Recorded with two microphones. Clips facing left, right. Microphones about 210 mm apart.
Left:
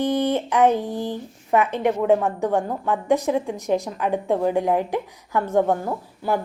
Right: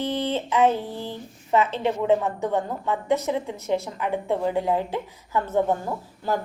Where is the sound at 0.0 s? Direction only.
15° left (ahead or behind).